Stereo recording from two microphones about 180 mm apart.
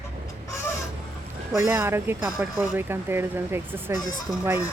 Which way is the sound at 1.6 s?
15° right (ahead or behind).